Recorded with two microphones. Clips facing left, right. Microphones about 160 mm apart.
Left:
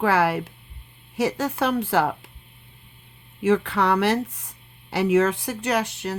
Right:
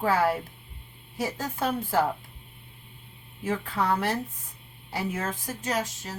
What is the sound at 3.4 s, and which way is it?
Speech, 80° left.